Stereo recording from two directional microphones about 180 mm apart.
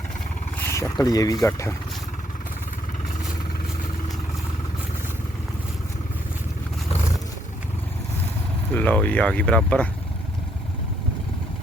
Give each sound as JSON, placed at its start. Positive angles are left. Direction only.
{"t": 0.6, "sound": "speech", "side_deg": 15}
{"t": 8.7, "sound": "speech", "side_deg": 10}